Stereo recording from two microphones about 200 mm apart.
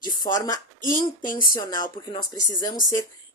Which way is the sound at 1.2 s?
40° left (ahead or behind).